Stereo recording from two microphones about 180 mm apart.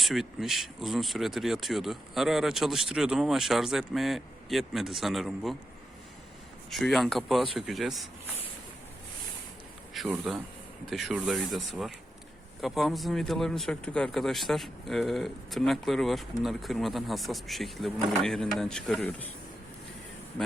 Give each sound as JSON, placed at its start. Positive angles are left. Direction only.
{"t": 0.0, "sound": "speech", "side_deg": 0}
{"t": 6.7, "sound": "speech", "side_deg": 0}
{"t": 9.9, "sound": "speech", "side_deg": 0}